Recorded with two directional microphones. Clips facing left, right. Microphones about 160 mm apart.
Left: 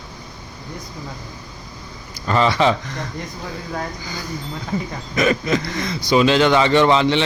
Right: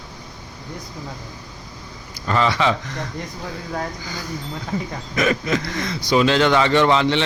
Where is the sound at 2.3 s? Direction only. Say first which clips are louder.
Left 2 dB; 30° left (ahead or behind).